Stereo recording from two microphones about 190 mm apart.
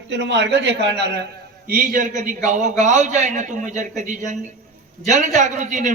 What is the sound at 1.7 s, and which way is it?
A man's voice, 45° right (ahead or behind).